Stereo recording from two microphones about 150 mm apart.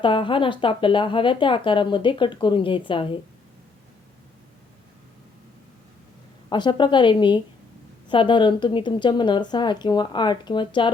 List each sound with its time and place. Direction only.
0.0 s speech: 35° left (ahead or behind)
6.5 s speech: 30° left (ahead or behind)